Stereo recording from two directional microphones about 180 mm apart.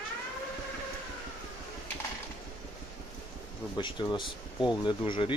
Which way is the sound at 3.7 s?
25° left (ahead or behind).